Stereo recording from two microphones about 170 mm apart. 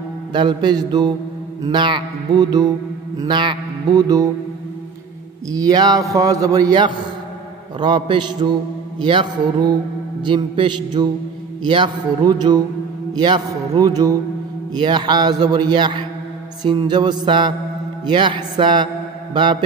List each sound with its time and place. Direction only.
0.3 s a man's voice: 25° right (ahead or behind)
5.5 s a man's voice: 20° right (ahead or behind)